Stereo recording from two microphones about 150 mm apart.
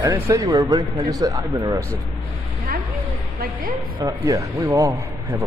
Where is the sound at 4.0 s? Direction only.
25° right (ahead or behind).